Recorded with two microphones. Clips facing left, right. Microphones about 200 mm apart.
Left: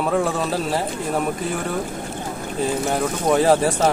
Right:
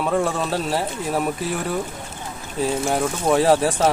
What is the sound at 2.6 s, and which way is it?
Speech, centre (ahead or behind).